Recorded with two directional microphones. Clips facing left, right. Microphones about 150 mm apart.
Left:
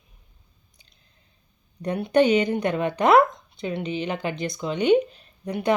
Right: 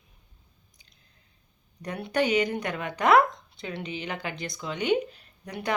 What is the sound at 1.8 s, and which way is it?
Speech, 20° left (ahead or behind).